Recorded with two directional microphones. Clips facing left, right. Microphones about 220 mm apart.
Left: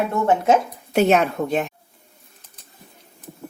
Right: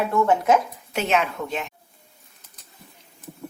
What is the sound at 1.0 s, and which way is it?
Speech, 45° left (ahead or behind).